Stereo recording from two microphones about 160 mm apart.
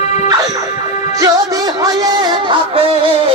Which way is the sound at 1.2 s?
25° right (ahead or behind).